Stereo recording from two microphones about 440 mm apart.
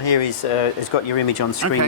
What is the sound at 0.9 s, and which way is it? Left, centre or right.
Speech, left.